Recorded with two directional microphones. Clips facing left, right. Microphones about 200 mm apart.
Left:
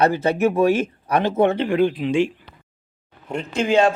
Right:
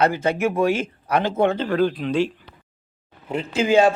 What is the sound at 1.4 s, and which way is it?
Speech, 20° left (ahead or behind).